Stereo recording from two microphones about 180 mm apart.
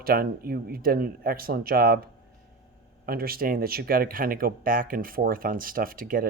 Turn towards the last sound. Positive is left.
turn(degrees=-50)  # may be behind; listen again after turning